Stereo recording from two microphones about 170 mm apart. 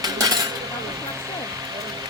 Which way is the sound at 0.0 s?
20° right (ahead or behind).